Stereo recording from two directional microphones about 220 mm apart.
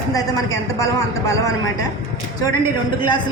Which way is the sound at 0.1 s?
15° left (ahead or behind).